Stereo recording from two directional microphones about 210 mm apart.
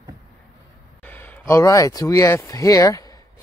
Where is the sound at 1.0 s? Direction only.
10° left (ahead or behind).